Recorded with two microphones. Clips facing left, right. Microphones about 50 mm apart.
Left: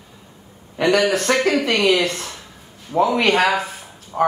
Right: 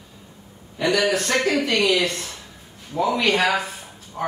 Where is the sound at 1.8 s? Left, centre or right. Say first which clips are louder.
Left 5 dB; left.